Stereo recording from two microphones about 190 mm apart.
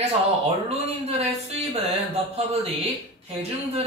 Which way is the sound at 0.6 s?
35° right (ahead or behind).